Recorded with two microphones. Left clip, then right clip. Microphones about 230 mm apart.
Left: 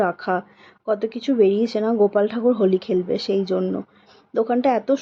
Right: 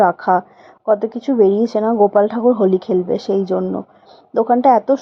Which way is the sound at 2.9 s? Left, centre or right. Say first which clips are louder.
Right 5 dB; centre.